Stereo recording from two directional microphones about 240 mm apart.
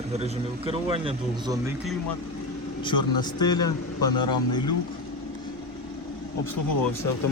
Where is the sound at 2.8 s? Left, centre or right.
Centre.